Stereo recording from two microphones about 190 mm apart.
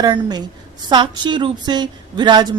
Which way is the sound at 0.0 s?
20° right (ahead or behind).